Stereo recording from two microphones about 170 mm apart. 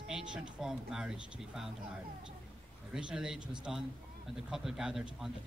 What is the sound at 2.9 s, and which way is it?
A man's voice, 5° right (ahead or behind).